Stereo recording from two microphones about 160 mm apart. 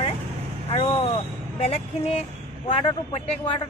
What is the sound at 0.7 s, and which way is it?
Speech, 40° left (ahead or behind).